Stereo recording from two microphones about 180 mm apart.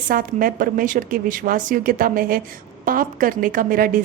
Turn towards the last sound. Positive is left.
turn(degrees=-50)  # may be behind; listen again after turning